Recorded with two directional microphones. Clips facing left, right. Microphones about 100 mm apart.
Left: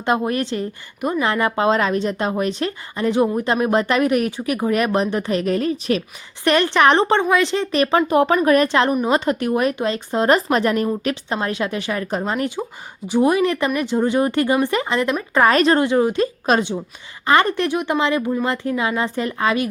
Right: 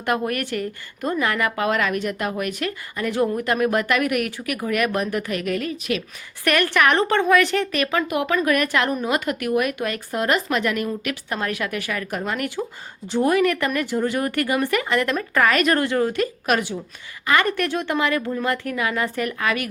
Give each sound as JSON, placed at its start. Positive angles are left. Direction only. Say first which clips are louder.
{"t": 0.0, "sound": "a woman's voice", "louder": "left 3 dB", "side_deg": 20}
{"t": 15.4, "sound": "a woman's voice", "louder": "left 5 dB", "side_deg": 30}